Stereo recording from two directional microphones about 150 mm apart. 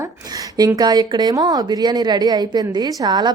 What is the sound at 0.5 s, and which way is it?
A woman's voice, 25° right (ahead or behind).